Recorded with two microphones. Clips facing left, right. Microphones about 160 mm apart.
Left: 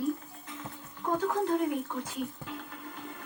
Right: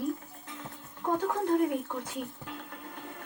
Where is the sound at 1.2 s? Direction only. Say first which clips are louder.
Right 1 dB; 50° right (ahead or behind).